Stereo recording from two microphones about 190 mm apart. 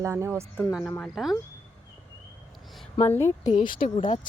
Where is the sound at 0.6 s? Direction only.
Centre (ahead or behind).